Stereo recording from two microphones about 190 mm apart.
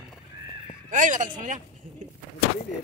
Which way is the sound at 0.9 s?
40° right (ahead or behind).